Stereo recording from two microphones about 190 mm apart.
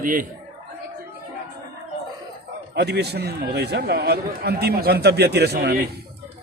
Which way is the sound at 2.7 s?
60° right (ahead or behind).